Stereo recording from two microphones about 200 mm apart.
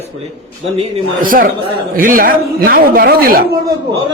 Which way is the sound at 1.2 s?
45° right (ahead or behind).